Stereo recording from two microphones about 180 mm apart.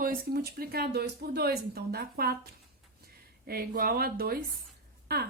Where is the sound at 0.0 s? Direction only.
55° right (ahead or behind).